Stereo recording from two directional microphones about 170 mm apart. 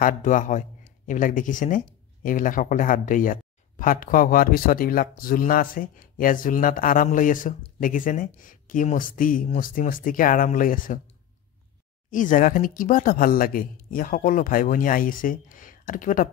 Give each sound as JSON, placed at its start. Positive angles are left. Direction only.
{"t": 0.0, "sound": "speech", "side_deg": 50}
{"t": 12.1, "sound": "speech", "side_deg": 50}